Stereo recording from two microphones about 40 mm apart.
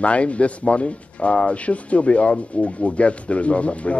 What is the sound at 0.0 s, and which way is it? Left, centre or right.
Speech, left.